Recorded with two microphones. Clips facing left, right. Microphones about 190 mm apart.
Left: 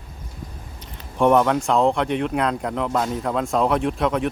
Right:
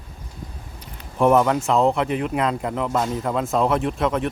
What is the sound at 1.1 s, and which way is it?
Speech, 5° right (ahead or behind).